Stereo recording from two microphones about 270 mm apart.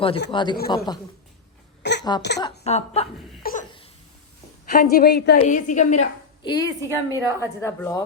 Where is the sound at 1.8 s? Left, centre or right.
Left.